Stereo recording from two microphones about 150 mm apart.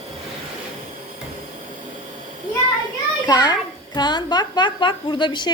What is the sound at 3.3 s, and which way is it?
A woman's voice, 25° left (ahead or behind).